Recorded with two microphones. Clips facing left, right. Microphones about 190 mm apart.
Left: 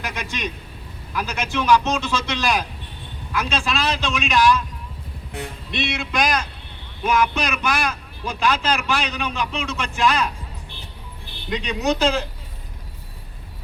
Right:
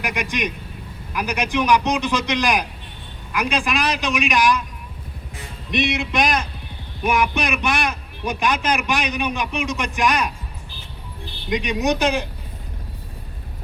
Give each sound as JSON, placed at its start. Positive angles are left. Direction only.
{"t": 0.0, "sound": "a man's voice", "side_deg": -15}
{"t": 5.4, "sound": "music", "side_deg": 65}
{"t": 5.7, "sound": "a man's voice", "side_deg": -20}
{"t": 11.4, "sound": "a man's voice", "side_deg": -15}